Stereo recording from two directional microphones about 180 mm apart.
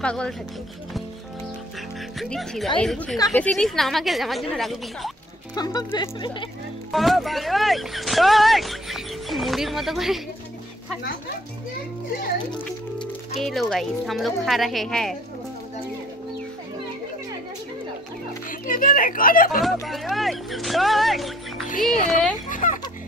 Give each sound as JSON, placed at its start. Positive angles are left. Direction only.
{"t": 0.0, "sound": "speech", "side_deg": 5}
{"t": 2.1, "sound": "speech", "side_deg": 0}
{"t": 5.5, "sound": "speech", "side_deg": 20}
{"t": 6.9, "sound": "speech", "side_deg": 0}
{"t": 13.4, "sound": "speech", "side_deg": 0}
{"t": 18.5, "sound": "speech", "side_deg": 50}
{"t": 19.6, "sound": "speech", "side_deg": 0}
{"t": 22.5, "sound": "a sound", "side_deg": 45}